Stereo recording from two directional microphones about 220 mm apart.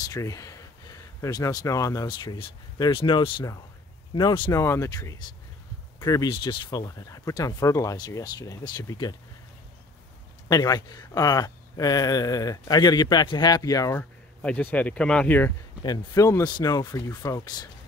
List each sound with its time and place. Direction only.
0.0 s speech: 15° left (ahead or behind)
10.5 s speech: 15° left (ahead or behind)